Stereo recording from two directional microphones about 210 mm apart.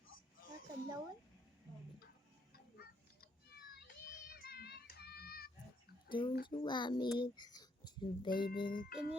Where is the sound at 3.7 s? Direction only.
50° left (ahead or behind).